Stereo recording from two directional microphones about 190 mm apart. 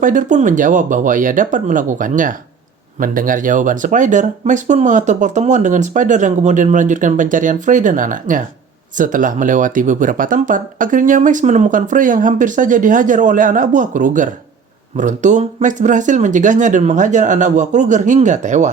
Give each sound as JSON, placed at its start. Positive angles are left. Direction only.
{"t": 0.0, "sound": "speech", "side_deg": -40}